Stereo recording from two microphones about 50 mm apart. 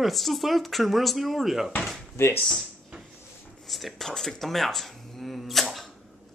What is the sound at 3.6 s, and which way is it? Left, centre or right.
Speech, centre.